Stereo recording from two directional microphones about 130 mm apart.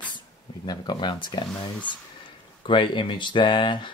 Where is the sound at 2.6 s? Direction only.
40° left (ahead or behind).